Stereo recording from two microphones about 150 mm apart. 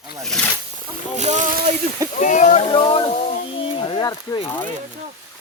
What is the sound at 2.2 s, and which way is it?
Speech, 55° left (ahead or behind).